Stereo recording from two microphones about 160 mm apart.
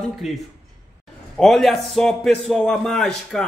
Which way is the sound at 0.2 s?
Centre (ahead or behind).